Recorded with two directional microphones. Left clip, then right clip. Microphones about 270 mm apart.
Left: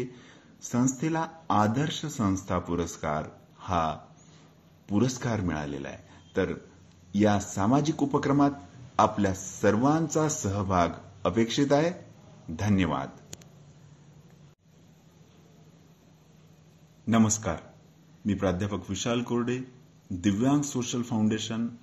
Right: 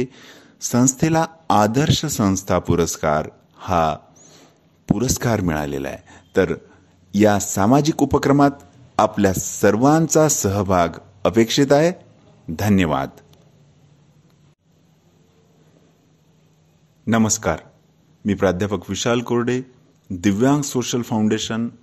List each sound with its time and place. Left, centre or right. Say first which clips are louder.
0.0 s speech: right 10 dB; right
17.0 s speech: right 7 dB; right